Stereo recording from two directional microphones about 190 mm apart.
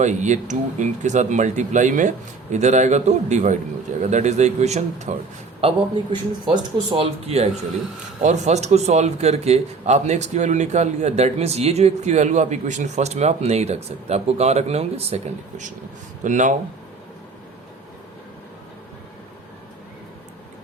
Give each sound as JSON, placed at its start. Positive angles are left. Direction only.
{"t": 0.0, "sound": "a man's voice", "side_deg": -40}